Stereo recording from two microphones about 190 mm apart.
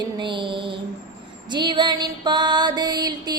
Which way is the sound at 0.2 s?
25° right (ahead or behind).